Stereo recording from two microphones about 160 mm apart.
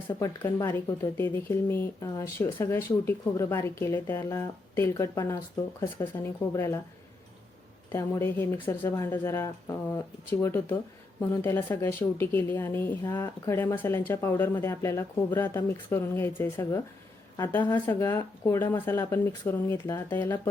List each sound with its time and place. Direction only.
0.2 s speech: 20° left (ahead or behind)
7.9 s speech: 15° left (ahead or behind)